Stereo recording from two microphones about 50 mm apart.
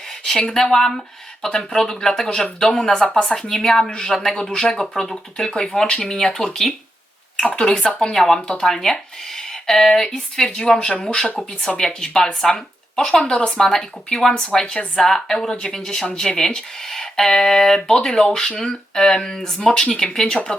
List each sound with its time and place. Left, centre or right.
0.3 s speech: centre
5.9 s speech: centre
7.4 s speech: left
10.5 s speech: centre